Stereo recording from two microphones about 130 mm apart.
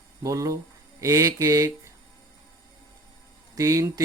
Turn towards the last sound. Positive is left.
turn(degrees=-25)  # may be behind; listen again after turning